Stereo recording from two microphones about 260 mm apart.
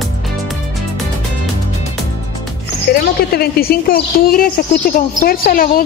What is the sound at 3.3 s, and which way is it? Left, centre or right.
A woman's voice, left.